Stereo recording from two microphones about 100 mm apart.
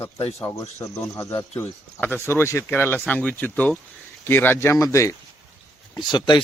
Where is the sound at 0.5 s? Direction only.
35° left (ahead or behind).